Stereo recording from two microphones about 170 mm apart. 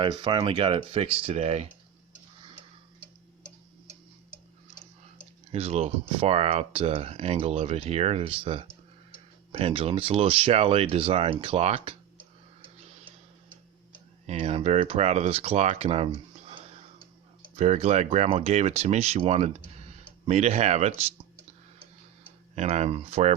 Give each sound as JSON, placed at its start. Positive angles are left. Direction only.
{"t": 0.0, "sound": "speech", "side_deg": -25}
{"t": 5.5, "sound": "speech", "side_deg": -35}
{"t": 14.3, "sound": "speech", "side_deg": -40}
{"t": 22.5, "sound": "speech", "side_deg": -40}